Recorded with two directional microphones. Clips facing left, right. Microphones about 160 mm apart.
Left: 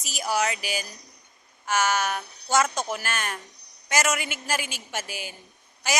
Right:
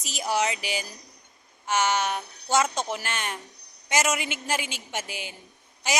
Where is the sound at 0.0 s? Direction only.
25° right (ahead or behind).